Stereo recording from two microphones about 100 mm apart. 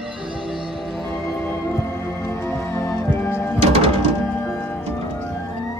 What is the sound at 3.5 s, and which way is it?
Music, 90° right.